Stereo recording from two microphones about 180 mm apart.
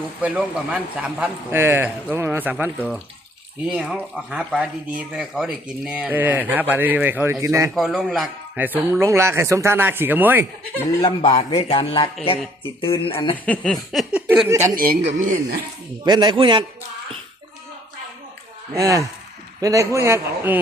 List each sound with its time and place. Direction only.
0.2 s speech: 5° right (ahead or behind)
3.7 s speech: 5° right (ahead or behind)
7.8 s speech: centre (ahead or behind)
11.0 s speech: 25° left (ahead or behind)
13.3 s speech: 10° left (ahead or behind); by 14.7 s 15° right (ahead or behind)
15.0 s speech: 45° right (ahead or behind)
16.0 s a man's voice: 25° right (ahead or behind)
18.8 s speech: 20° right (ahead or behind)